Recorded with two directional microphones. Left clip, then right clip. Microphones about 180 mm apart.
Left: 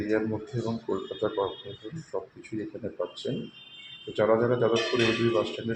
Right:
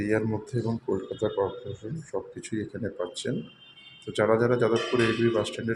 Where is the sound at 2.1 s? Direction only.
35° right (ahead or behind).